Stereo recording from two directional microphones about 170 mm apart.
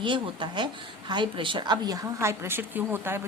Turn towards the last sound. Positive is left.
turn(degrees=-10)  # may be behind; listen again after turning